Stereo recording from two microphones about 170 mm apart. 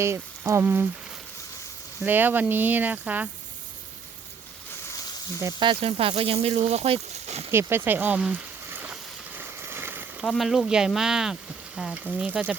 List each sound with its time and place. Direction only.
0.0 s speech: 15° right (ahead or behind)
2.0 s speech: 10° right (ahead or behind)
5.4 s speech: 25° right (ahead or behind); by 7.4 s 40° right (ahead or behind)
7.5 s speech: 15° right (ahead or behind)
9.6 s a sound: 15° right (ahead or behind)
10.2 s speech: centre (ahead or behind)